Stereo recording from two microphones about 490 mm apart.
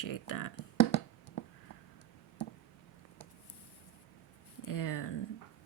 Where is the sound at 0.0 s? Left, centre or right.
Left.